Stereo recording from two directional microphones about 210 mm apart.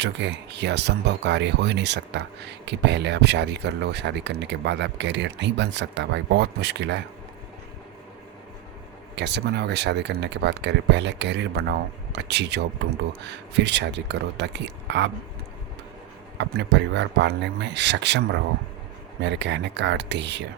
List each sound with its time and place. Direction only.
0.0 s speech: 55° right (ahead or behind)
9.1 s speech: 55° right (ahead or behind)
16.4 s speech: 55° right (ahead or behind)